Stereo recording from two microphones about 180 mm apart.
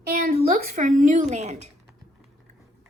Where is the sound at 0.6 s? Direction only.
50° right (ahead or behind).